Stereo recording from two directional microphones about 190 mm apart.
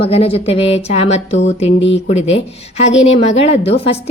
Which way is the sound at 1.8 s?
70° left (ahead or behind).